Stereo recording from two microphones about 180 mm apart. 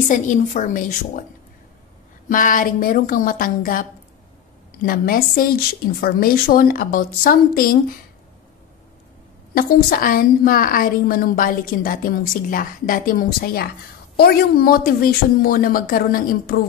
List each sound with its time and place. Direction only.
0.1 s a woman's voice: 45° left (ahead or behind)
2.2 s a woman's voice: 50° left (ahead or behind)
4.8 s a woman's voice: 50° left (ahead or behind)
9.5 s a woman's voice: 55° left (ahead or behind)